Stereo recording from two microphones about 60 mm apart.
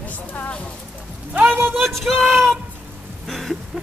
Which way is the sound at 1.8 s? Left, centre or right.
Centre.